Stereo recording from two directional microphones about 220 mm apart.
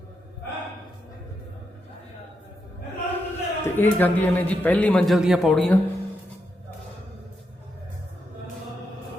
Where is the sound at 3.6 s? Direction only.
10° left (ahead or behind).